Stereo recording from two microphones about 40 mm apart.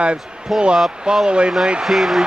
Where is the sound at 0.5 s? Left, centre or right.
Centre.